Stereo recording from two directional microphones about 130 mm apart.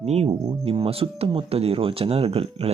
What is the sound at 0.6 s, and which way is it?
Speech, 45° right (ahead or behind).